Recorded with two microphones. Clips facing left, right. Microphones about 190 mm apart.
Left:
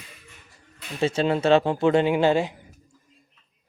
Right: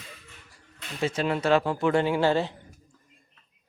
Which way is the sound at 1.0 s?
25° left (ahead or behind).